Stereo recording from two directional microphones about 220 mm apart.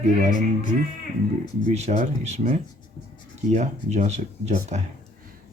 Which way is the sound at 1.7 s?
30° right (ahead or behind).